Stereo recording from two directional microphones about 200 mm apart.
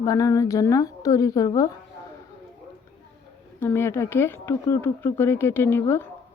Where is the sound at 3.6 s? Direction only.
10° left (ahead or behind).